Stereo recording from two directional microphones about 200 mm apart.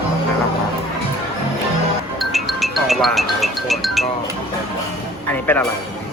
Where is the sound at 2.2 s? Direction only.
Centre (ahead or behind).